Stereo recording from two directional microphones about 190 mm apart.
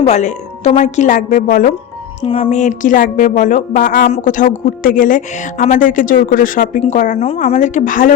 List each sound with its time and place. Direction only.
0.0 s speech: 40° left (ahead or behind)
2.2 s a woman's voice: 30° left (ahead or behind)